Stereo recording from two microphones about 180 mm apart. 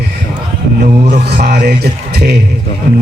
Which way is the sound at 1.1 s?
50° right (ahead or behind).